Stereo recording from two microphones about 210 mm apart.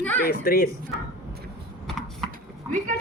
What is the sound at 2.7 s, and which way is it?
Speech, 40° right (ahead or behind).